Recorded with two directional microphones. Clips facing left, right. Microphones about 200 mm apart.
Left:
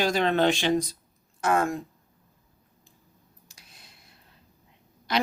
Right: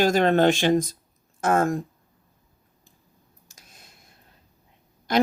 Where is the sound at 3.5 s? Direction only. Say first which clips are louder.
Right 3 dB; 45° right (ahead or behind).